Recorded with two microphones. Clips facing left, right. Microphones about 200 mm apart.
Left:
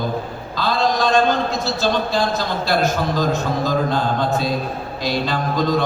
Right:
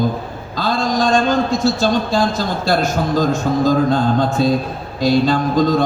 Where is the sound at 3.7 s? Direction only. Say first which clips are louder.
Right 5 dB; 50° right (ahead or behind).